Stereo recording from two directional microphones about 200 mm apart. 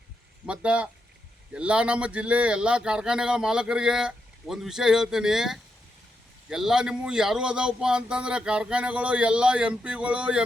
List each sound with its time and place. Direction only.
0.4 s speech: 5° right (ahead or behind)